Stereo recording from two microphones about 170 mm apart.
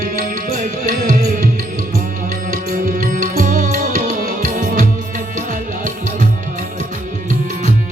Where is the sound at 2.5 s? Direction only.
55° right (ahead or behind).